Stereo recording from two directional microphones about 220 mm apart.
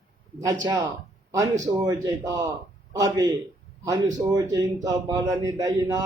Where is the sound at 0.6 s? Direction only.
20° right (ahead or behind).